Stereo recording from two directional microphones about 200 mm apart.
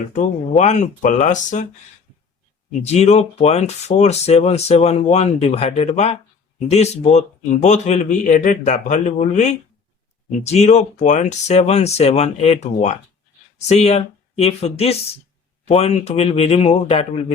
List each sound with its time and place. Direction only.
0.1 s speech: 35° left (ahead or behind)
2.8 s speech: 35° left (ahead or behind)